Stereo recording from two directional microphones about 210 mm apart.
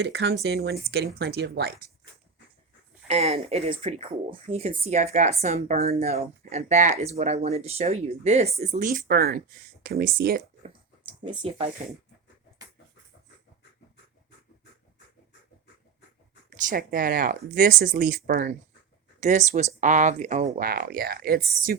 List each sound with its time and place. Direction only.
0.0 s speech: 55° right (ahead or behind)
3.1 s speech: 30° right (ahead or behind)
11.3 s speech: 25° right (ahead or behind)
16.6 s speech: 40° right (ahead or behind)